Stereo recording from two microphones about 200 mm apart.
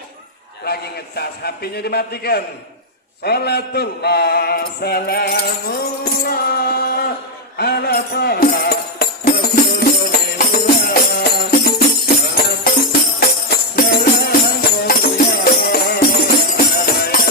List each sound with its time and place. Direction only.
0.6 s mantra: 50° left (ahead or behind)
7.6 s music: 50° left (ahead or behind)